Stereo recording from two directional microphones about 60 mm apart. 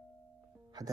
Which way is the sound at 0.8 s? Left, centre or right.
Right.